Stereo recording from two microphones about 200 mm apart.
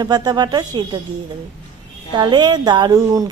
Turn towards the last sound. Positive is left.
turn(degrees=-20)  # may be behind; listen again after turning